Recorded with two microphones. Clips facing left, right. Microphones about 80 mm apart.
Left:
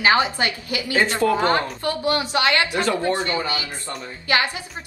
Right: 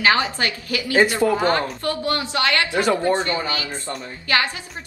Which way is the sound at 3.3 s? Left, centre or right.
Left.